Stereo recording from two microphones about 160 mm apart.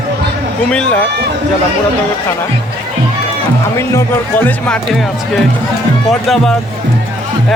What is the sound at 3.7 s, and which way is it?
Speech, 15° left (ahead or behind).